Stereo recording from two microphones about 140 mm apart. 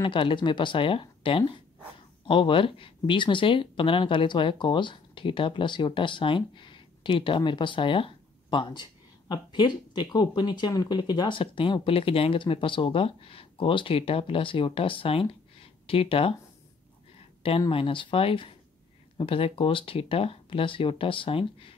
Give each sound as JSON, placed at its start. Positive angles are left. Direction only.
{"t": 0.0, "sound": "speech", "side_deg": 35}
{"t": 17.4, "sound": "speech", "side_deg": 40}